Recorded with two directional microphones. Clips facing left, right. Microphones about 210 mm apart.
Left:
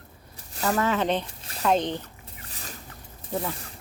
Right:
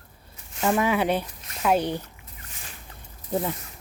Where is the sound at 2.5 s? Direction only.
35° left (ahead or behind).